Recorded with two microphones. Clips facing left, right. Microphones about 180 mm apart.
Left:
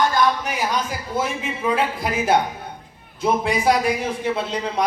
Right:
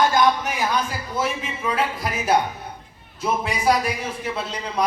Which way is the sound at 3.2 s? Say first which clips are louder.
Left 3 dB; 25° left (ahead or behind).